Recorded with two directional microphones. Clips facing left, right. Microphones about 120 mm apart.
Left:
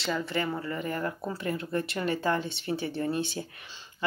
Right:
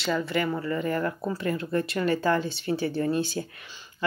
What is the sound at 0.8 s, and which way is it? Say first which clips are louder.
Speech: right 4 dB; 55° right (ahead or behind).